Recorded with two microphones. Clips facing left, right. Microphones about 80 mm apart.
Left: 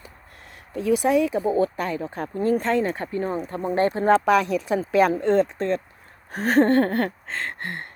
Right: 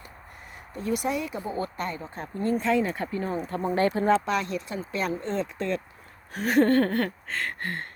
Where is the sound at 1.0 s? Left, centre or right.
Left.